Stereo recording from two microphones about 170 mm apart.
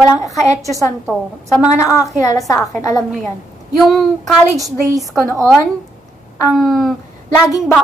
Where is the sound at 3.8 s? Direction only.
Centre (ahead or behind).